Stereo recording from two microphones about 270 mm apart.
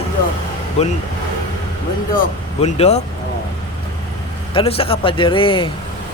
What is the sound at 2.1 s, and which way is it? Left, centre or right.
Speech, left.